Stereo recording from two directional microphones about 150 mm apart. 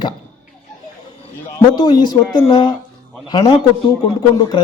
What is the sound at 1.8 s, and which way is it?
A man's voice, 30° left (ahead or behind).